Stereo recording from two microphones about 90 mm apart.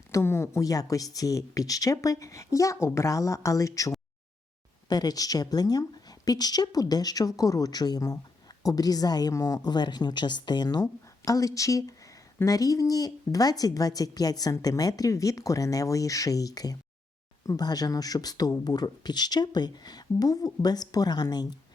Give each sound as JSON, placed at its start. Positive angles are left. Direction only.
{"t": 0.1, "sound": "speech", "side_deg": 30}
{"t": 11.3, "sound": "speech", "side_deg": 40}